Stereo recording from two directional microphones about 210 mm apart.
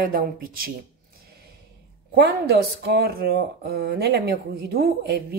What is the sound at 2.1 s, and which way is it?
Speech, 50° right (ahead or behind).